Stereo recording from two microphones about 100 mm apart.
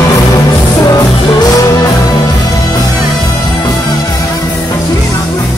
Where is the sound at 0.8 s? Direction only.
35° left (ahead or behind).